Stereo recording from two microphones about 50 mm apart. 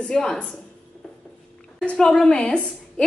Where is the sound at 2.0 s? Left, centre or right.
Centre.